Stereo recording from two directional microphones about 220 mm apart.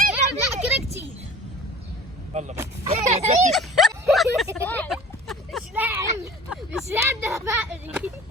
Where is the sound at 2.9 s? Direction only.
30° right (ahead or behind).